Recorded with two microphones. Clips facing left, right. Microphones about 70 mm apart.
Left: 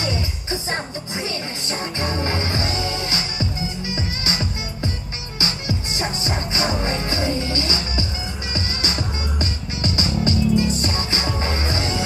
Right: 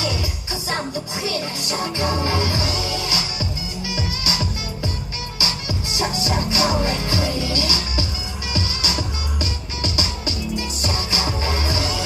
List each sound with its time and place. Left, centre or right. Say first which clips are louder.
0.0 s music: even; left